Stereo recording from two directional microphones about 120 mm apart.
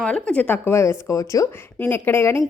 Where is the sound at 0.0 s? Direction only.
10° left (ahead or behind).